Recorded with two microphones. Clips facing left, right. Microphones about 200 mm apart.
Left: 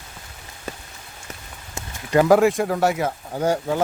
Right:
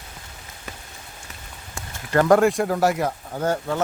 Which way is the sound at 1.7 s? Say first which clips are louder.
Left 2 dB; 15° left (ahead or behind).